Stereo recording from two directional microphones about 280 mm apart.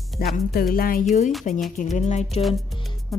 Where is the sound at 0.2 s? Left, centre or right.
Left.